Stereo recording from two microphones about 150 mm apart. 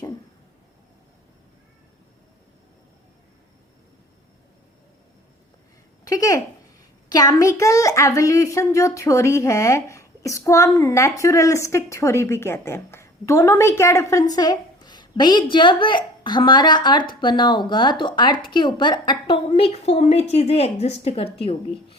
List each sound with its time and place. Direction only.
6.1 s a woman's voice: 25° left (ahead or behind)
19.5 s a woman's voice: 45° left (ahead or behind)